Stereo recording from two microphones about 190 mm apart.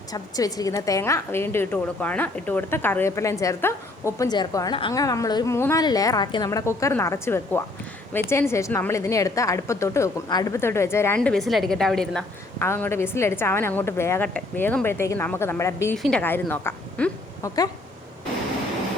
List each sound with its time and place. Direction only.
0.1 s a woman's voice: 20° left (ahead or behind)